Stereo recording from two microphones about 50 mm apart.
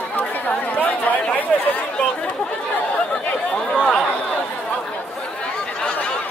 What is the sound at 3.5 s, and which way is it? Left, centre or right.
Chatter, centre.